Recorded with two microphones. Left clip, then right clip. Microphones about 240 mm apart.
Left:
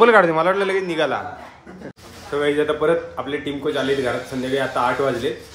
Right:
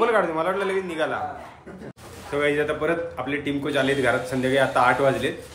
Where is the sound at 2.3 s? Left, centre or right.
Centre.